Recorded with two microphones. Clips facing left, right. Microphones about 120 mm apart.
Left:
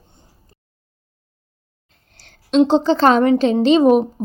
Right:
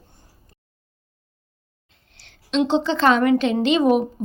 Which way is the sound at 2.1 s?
40° left (ahead or behind).